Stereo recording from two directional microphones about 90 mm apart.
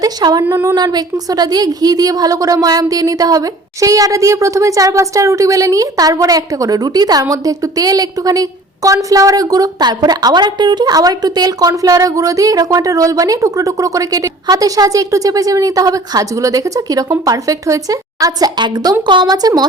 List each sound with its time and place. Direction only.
0.0 s speech: 50° right (ahead or behind)
0.4 s speech: 25° right (ahead or behind)
0.8 s a woman's voice: 50° right (ahead or behind)